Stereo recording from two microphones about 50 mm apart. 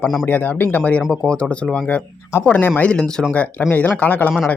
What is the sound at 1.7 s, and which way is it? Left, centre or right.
Speech, left.